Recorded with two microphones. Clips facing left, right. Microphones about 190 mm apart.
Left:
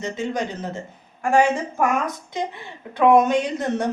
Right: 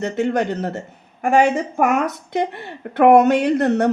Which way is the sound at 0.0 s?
65° right (ahead or behind).